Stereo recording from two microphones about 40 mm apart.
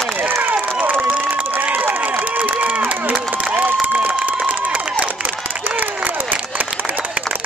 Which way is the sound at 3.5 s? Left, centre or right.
Right.